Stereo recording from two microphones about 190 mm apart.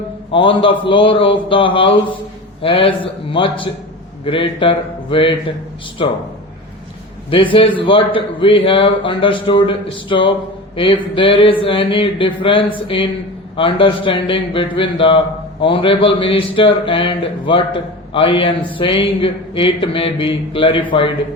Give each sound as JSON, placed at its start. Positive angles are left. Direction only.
{"t": 0.3, "sound": "a man's voice", "side_deg": 25}
{"t": 7.3, "sound": "a man's voice", "side_deg": 25}